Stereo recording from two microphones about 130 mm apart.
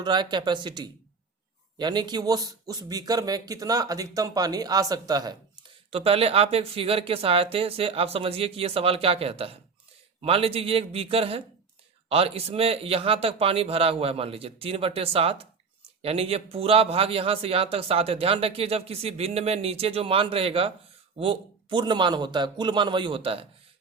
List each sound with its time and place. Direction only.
0.0 s a man's voice: 35° right (ahead or behind)
5.9 s a man's voice: 50° right (ahead or behind)